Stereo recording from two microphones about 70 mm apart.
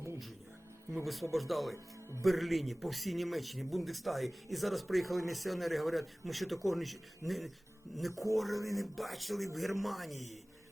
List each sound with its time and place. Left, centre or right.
1.0 s a man's voice: centre
1.7 s speech: right
2.2 s a man's voice: centre